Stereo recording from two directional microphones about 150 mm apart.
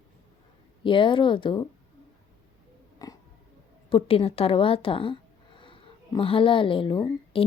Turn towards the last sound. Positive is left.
turn(degrees=35)  # may be behind; listen again after turning